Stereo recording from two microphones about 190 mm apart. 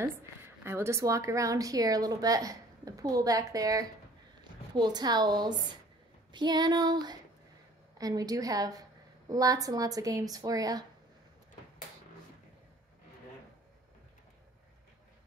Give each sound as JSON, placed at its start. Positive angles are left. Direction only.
{"t": 0.7, "sound": "a woman's voice", "side_deg": -15}